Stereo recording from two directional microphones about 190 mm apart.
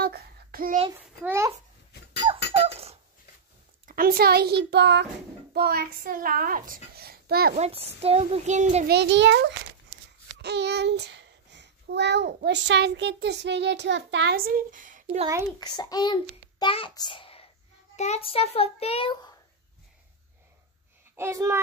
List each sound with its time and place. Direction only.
0.0 s a sound: 55° right (ahead or behind)
1.2 s a child's voice: 15° right (ahead or behind)
2.5 s dog: 30° right (ahead or behind)
3.8 s a child's voice: 50° right (ahead or behind)
7.5 s a child's voice: 35° right (ahead or behind)
8.8 s a child's voice: 65° right (ahead or behind)
14.3 s speech: 45° right (ahead or behind)
15.6 s a child's voice: 20° left (ahead or behind)
21.2 s a child's voice: 15° right (ahead or behind)